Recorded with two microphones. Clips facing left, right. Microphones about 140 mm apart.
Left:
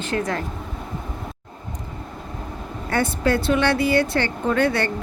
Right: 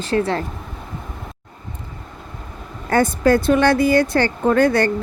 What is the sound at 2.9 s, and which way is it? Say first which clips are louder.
A woman's voice: right 6 dB; 45° right (ahead or behind).